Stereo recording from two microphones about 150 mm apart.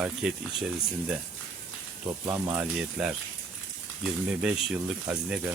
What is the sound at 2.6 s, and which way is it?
Speech, 5° right (ahead or behind).